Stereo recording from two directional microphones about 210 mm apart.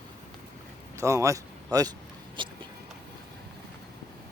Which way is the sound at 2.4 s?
25° right (ahead or behind).